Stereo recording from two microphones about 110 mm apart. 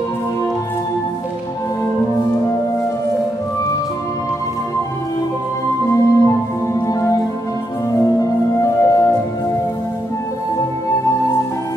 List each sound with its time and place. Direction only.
5.9 s music: 30° left (ahead or behind)
8.2 s music: 30° left (ahead or behind)